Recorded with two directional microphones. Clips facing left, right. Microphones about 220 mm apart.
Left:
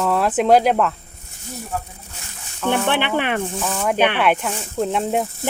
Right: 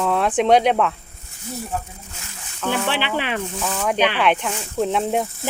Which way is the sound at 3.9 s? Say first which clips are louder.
Left 2 dB; 55° left (ahead or behind).